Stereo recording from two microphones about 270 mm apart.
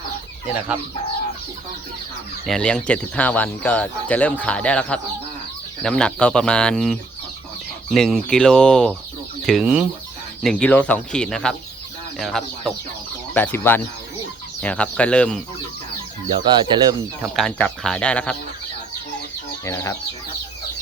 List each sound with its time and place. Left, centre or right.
2.5 s speech: centre
7.9 s speech: centre
16.3 s speech: centre
17.2 s speech: centre
19.6 s speech: centre